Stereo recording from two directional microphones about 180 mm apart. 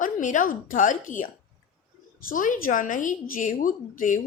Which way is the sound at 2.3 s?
50° left (ahead or behind).